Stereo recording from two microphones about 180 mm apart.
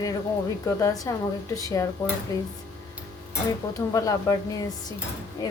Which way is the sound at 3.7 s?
20° left (ahead or behind).